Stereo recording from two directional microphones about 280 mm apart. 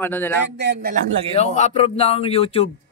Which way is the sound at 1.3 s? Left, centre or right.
Left.